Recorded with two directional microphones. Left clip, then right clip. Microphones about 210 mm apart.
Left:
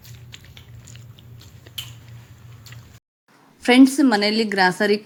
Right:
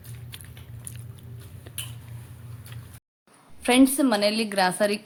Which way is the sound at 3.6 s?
5° left (ahead or behind).